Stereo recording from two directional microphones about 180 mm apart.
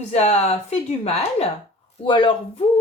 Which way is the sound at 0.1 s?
35° left (ahead or behind).